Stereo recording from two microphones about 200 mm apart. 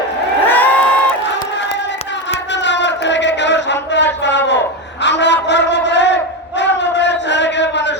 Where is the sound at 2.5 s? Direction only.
60° left (ahead or behind).